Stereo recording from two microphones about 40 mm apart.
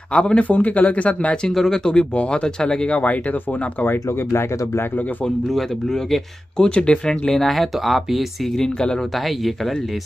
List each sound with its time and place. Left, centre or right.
0.1 s speech: left
0.4 s speech: left
1.5 s speech: centre
1.9 s speech: left
2.9 s speech: left
3.8 s speech: left
5.5 s speech: centre
6.6 s speech: left
7.1 s speech: centre
8.5 s speech: centre